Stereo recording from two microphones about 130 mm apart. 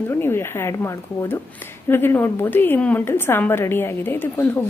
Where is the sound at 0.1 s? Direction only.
20° left (ahead or behind).